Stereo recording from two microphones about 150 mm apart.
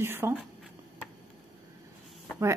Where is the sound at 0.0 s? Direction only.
15° right (ahead or behind).